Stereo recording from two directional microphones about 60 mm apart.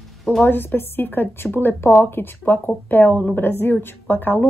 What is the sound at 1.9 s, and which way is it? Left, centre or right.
Speech, left.